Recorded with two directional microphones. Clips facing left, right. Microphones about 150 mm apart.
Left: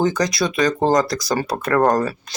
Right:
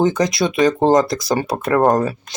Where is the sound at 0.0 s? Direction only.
25° right (ahead or behind).